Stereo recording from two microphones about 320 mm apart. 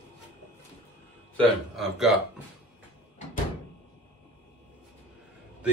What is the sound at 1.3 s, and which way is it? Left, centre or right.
Speech, centre.